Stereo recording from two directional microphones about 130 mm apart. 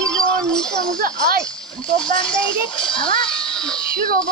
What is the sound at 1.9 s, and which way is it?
A child's voice, 40° left (ahead or behind).